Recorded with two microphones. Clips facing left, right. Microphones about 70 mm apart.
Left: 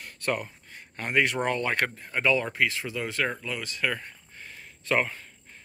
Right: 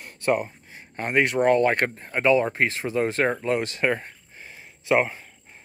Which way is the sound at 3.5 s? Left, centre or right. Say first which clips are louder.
Right 10 dB; right.